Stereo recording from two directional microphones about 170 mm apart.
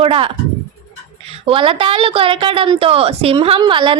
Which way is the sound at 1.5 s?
30° right (ahead or behind).